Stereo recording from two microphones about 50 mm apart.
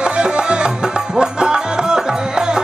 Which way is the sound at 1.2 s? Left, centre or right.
Centre.